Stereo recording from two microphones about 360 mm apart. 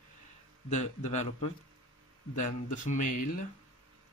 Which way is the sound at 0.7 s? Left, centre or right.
Centre.